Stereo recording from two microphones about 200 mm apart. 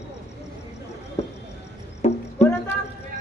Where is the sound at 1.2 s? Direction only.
30° left (ahead or behind).